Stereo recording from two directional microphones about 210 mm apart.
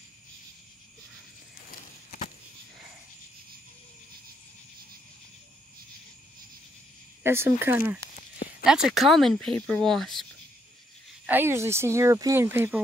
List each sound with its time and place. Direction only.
1.7 s a sound: 40° left (ahead or behind)
7.2 s speech: 10° right (ahead or behind)
11.2 s speech: 10° right (ahead or behind)